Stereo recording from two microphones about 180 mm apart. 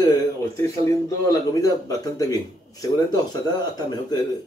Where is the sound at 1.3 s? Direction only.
20° left (ahead or behind).